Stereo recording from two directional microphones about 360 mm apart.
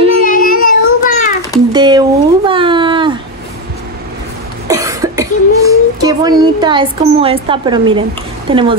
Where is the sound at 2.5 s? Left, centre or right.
Centre.